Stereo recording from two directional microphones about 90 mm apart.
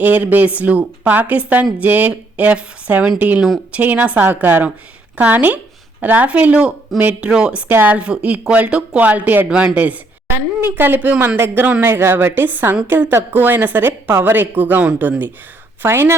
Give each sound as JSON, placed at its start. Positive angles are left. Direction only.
{"t": 0.0, "sound": "a woman's voice", "side_deg": -20}